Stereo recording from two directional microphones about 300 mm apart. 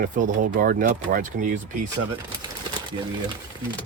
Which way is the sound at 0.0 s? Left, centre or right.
Right.